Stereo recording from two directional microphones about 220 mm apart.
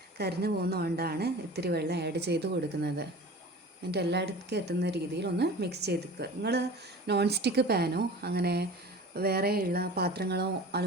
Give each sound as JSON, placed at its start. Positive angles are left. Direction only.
{"t": 0.2, "sound": "a woman's voice", "side_deg": -45}